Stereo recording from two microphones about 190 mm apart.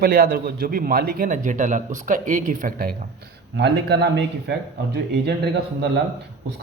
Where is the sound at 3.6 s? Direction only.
60° right (ahead or behind).